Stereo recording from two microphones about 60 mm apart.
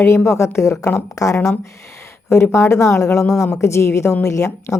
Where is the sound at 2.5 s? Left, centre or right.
Left.